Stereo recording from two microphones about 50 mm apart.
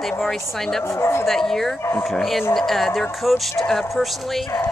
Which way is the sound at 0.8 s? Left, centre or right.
Left.